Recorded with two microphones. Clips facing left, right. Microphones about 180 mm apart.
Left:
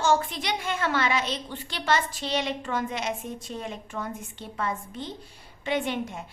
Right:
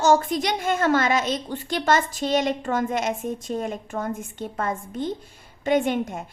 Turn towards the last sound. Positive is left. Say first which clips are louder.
# right 6 dB
turn(degrees=-50)  # may be behind; listen again after turning